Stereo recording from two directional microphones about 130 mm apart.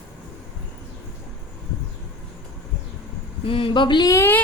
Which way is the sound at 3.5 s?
45° left (ahead or behind).